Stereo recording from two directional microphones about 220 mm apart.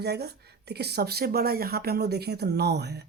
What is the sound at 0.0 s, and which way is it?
Speech, 50° right (ahead or behind).